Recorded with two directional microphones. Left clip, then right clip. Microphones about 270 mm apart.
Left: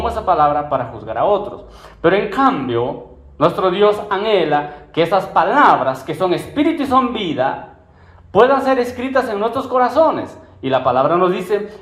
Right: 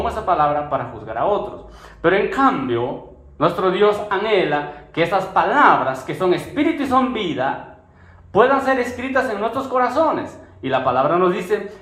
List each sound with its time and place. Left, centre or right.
0.0 s speech: left